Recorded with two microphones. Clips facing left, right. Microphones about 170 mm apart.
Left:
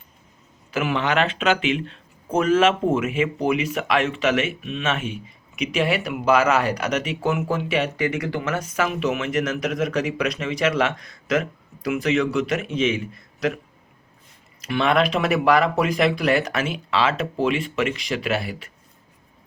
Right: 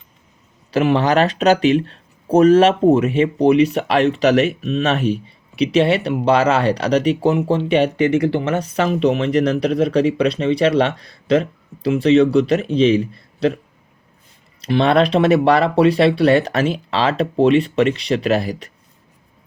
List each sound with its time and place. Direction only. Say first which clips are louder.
0.7 s speech: right 7 dB; 35° right (ahead or behind)
14.6 s speech: right 5 dB; 35° right (ahead or behind)